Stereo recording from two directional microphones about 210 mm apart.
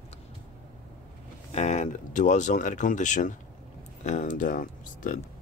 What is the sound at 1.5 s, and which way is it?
Speech, 35° left (ahead or behind).